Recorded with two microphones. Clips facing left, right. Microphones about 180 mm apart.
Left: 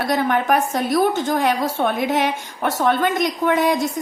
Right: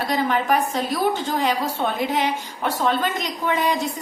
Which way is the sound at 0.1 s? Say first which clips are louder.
Left 2 dB; 55° left (ahead or behind).